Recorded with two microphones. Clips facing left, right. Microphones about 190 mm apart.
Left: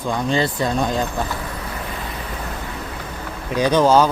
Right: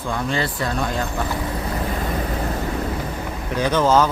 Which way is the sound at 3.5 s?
15° left (ahead or behind).